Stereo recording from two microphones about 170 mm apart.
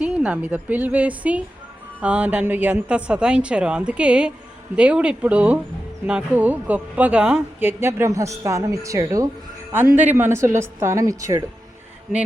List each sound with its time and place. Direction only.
0.0 s speech: 10° right (ahead or behind)